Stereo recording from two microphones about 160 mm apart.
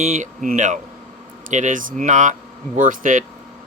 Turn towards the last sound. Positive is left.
turn(degrees=-55)  # may be behind; listen again after turning